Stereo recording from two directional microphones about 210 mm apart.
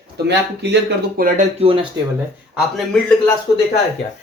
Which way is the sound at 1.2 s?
45° right (ahead or behind).